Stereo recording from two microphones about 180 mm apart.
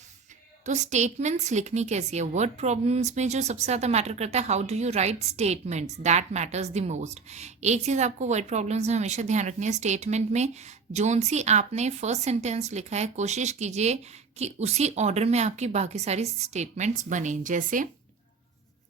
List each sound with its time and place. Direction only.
0.6 s a woman's voice: 40° right (ahead or behind)